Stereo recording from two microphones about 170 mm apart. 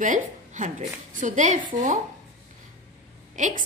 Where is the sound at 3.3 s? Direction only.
45° right (ahead or behind).